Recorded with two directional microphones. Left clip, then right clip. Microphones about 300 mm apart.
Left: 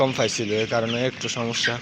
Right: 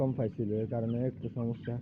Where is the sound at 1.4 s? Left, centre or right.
Centre.